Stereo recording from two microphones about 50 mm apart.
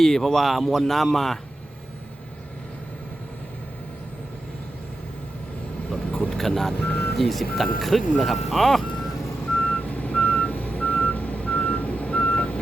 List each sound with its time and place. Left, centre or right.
0.0 s speech: centre
6.1 s vehicle: left
6.3 s speech: centre
6.7 s speech: left
7.2 s speech: centre
9.6 s reversing beeps: left